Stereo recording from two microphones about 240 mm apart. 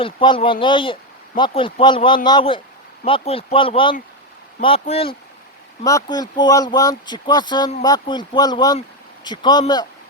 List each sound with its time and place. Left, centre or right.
0.0 s a man's voice: left